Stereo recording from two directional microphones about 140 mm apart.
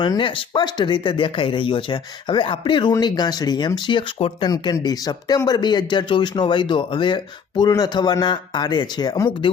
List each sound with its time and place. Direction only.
0.0 s speech: 35° left (ahead or behind)